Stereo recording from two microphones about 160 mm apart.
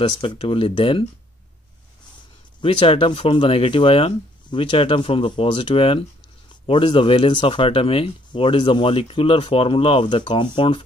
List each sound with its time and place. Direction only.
0.2 s speech: 30° left (ahead or behind)
2.6 s speech: 35° left (ahead or behind)